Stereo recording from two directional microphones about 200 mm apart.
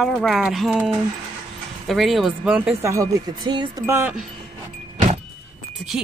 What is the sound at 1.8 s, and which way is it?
Speech, centre (ahead or behind).